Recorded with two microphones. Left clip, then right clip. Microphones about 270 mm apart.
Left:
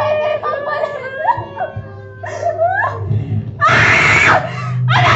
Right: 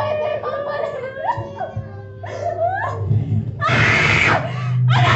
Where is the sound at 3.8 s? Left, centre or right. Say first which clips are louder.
Left 3 dB; left.